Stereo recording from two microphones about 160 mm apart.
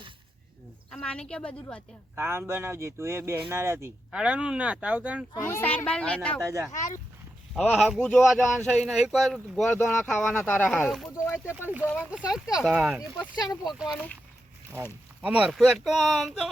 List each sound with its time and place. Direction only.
0.9 s a child's voice: 5° left (ahead or behind)
2.1 s speech: 15° right (ahead or behind)
5.3 s a child's voice: 15° left (ahead or behind)
6.4 s speech: 20° right (ahead or behind)
6.7 s speech: 50° left (ahead or behind)
7.5 s speech: 5° right (ahead or behind)
11.6 s speech: 10° right (ahead or behind)
13.9 s a child's voice: 10° left (ahead or behind)
15.2 s speech: 10° right (ahead or behind)